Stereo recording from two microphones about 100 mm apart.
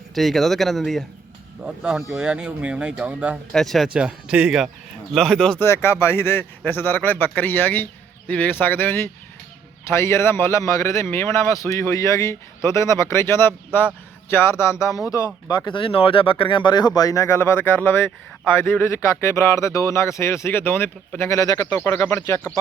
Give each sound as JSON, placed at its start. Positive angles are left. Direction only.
{"t": 0.1, "sound": "speech", "side_deg": 0}
{"t": 1.6, "sound": "speech", "side_deg": -10}
{"t": 3.5, "sound": "speech", "side_deg": 5}
{"t": 3.9, "sound": "speech", "side_deg": -10}
{"t": 5.1, "sound": "speech", "side_deg": 5}
{"t": 5.5, "sound": "a man's voice", "side_deg": 25}
{"t": 15.4, "sound": "a man's voice", "side_deg": 45}